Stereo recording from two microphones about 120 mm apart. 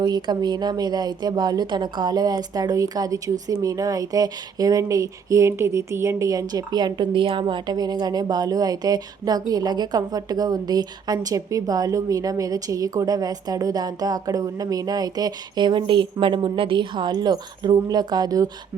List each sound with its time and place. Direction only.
0.0 s a woman's voice: 35° right (ahead or behind)